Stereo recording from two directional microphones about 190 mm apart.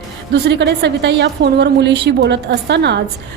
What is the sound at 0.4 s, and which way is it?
A woman's voice, 60° right (ahead or behind).